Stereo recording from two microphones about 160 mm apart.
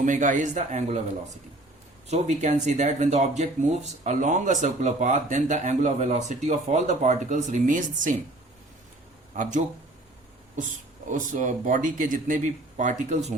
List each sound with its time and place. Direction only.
0.0 s speech: 55° right (ahead or behind)
2.0 s speech: 45° right (ahead or behind)
9.3 s speech: 50° right (ahead or behind)
11.1 s speech: 50° right (ahead or behind)